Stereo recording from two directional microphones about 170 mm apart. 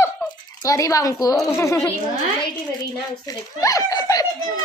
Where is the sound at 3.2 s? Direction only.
20° left (ahead or behind).